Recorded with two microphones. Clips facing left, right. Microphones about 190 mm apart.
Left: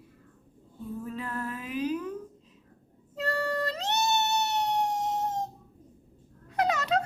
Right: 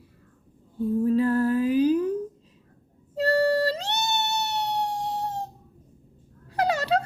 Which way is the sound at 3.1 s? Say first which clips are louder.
Right 9 dB; 35° right (ahead or behind).